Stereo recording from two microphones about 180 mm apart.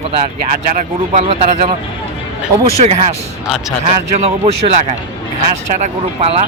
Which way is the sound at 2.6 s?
35° right (ahead or behind).